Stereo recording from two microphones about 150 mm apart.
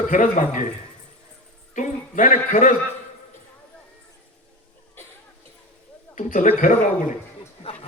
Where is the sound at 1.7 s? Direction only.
60° left (ahead or behind).